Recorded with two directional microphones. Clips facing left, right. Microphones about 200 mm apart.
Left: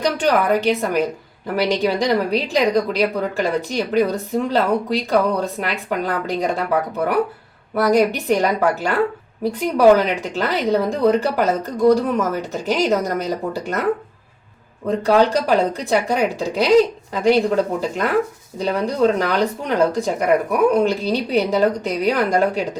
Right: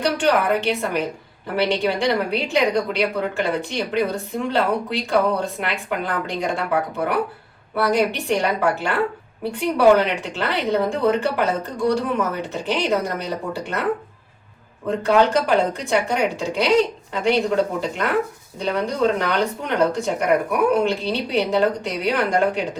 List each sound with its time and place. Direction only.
0.0 s a woman's voice: 40° left (ahead or behind)
7.8 s a woman's voice: 40° left (ahead or behind)
14.8 s a woman's voice: 35° left (ahead or behind)